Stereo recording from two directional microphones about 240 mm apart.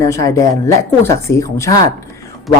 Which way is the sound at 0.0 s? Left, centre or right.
Centre.